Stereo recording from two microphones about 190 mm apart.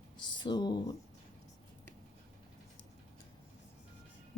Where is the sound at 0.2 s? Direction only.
25° left (ahead or behind).